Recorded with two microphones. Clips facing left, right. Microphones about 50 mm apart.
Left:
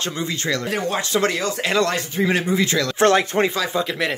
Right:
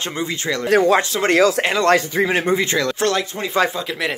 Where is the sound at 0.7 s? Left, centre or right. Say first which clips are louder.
Right 10 dB; right.